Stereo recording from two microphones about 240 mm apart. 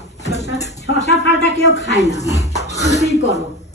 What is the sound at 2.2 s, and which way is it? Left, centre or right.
Speech, centre.